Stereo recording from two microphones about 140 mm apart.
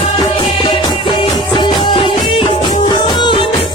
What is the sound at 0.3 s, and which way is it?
Music, 35° left (ahead or behind).